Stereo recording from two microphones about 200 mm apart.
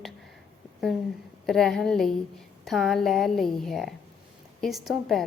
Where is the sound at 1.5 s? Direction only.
Centre (ahead or behind).